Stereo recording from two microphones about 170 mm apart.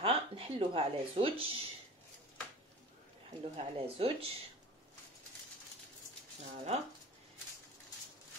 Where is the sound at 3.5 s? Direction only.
35° right (ahead or behind).